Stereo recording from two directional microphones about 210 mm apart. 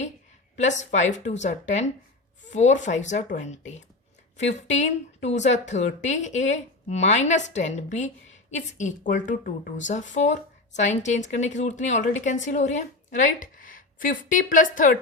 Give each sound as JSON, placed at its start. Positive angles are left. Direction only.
{"t": 0.5, "sound": "speech", "side_deg": 35}